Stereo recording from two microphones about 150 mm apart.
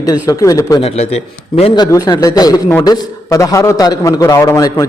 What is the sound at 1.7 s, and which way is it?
A man's voice, 25° left (ahead or behind).